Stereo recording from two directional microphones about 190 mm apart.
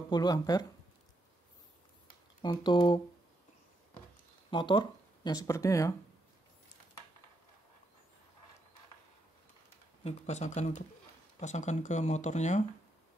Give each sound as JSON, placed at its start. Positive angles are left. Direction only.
{"t": 0.1, "sound": "speech", "side_deg": 20}
{"t": 2.4, "sound": "speech", "side_deg": 25}
{"t": 4.5, "sound": "speech", "side_deg": 25}
{"t": 10.0, "sound": "speech", "side_deg": 35}